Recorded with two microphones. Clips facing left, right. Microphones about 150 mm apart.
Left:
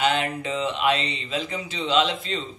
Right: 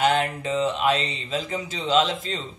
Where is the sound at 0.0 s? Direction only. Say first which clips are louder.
Right 2 dB; 40° right (ahead or behind).